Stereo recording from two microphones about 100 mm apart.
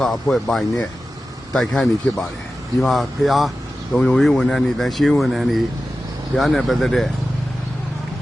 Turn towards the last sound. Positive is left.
turn(degrees=5)  # may be behind; listen again after turning